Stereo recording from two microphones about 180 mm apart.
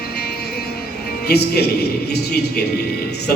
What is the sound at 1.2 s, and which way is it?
Speech, 65° left (ahead or behind).